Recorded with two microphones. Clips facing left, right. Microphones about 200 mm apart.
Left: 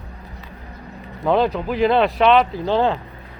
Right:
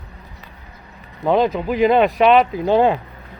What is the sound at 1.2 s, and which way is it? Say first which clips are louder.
Speech: right 1 dB; 5° right (ahead or behind).